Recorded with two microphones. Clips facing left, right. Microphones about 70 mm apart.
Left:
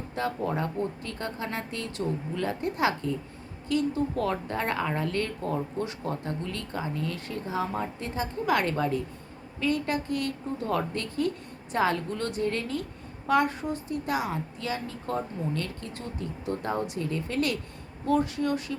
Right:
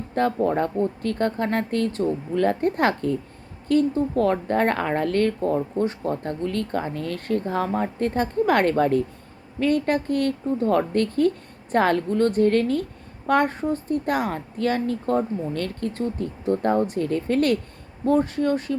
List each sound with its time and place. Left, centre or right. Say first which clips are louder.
0.1 s a woman's voice: right 8 dB; right